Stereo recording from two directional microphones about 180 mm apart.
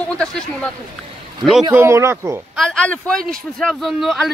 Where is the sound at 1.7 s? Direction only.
15° right (ahead or behind).